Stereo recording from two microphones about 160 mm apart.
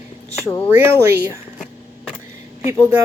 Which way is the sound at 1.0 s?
15° right (ahead or behind).